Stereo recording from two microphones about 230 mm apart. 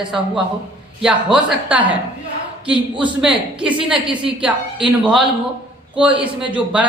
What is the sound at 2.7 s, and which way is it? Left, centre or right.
Speech, right.